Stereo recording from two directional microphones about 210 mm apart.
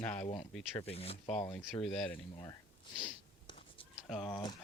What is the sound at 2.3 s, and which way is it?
Speech, 20° left (ahead or behind).